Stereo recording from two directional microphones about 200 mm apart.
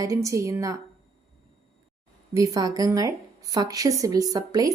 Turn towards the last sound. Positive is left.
turn(degrees=-20)  # may be behind; listen again after turning